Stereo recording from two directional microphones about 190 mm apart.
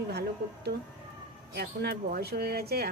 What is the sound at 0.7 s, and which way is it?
A woman's voice, 55° right (ahead or behind).